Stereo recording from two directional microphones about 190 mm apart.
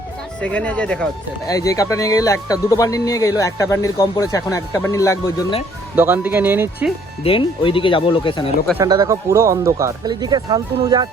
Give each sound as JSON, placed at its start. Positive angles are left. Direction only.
{"t": 0.4, "sound": "speech", "side_deg": 5}
{"t": 1.5, "sound": "speech", "side_deg": 15}
{"t": 6.0, "sound": "speech", "side_deg": -10}
{"t": 7.3, "sound": "speech", "side_deg": 25}
{"t": 8.8, "sound": "speech", "side_deg": -20}